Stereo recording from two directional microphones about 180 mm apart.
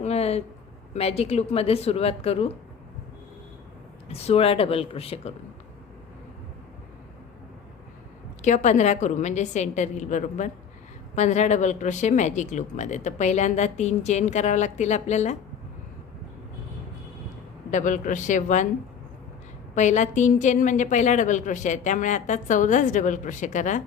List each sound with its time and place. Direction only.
0.0 s speech: 35° left (ahead or behind)
4.1 s speech: 35° left (ahead or behind)
8.4 s speech: 40° left (ahead or behind)
17.7 s a woman's voice: 45° left (ahead or behind)
19.7 s a woman's voice: 40° left (ahead or behind)